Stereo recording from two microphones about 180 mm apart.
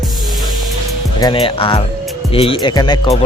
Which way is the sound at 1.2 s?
30° left (ahead or behind).